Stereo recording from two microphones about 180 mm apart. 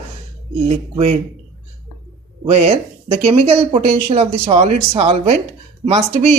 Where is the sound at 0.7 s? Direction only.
35° right (ahead or behind).